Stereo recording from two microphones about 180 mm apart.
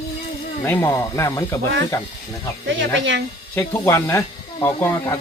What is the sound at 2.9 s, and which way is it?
Speech, 90° right.